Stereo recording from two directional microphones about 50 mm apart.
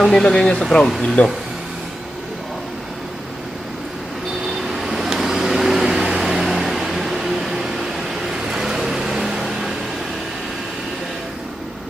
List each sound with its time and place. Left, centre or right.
0.0 s speech: centre
1.2 s speech: left
4.7 s vehicle: centre